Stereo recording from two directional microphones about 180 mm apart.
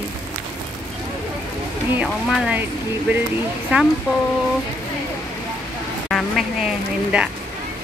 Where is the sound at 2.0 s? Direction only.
5° right (ahead or behind).